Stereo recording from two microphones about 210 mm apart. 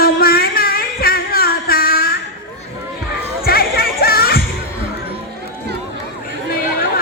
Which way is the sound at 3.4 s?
45° left (ahead or behind).